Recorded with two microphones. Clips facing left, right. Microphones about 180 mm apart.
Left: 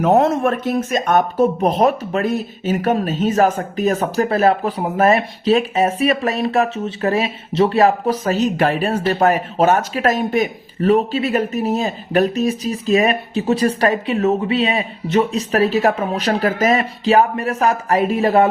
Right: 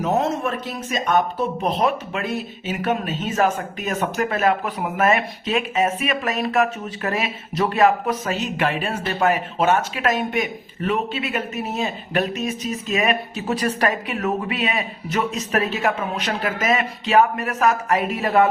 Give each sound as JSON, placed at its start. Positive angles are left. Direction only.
{"t": 0.0, "sound": "speech", "side_deg": 55}